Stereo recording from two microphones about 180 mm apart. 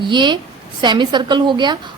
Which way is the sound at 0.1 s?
25° right (ahead or behind).